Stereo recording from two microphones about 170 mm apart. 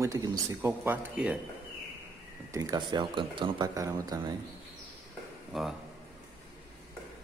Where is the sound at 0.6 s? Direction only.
10° right (ahead or behind).